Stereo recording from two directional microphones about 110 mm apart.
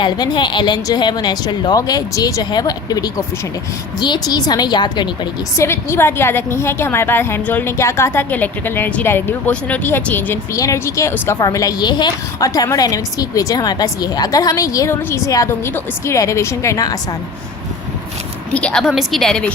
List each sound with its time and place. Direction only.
0.0 s a woman's voice: 45° left (ahead or behind)
5.5 s a woman's voice: 25° left (ahead or behind)
10.5 s a woman's voice: 30° left (ahead or behind)
18.5 s a woman's voice: 10° left (ahead or behind)